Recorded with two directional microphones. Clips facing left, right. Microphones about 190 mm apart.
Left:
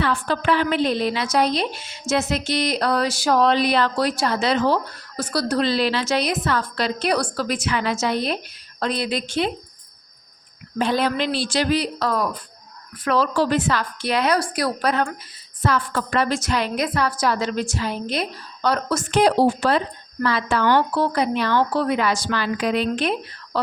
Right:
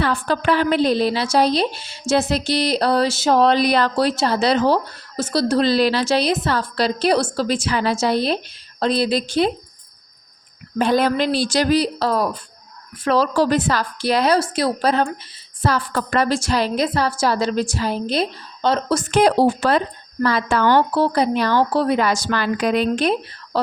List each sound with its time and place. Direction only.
0.0 s a woman's voice: 40° right (ahead or behind)
10.8 s a woman's voice: 50° right (ahead or behind); by 19.0 s 30° right (ahead or behind)
19.1 s a woman's voice: 50° right (ahead or behind)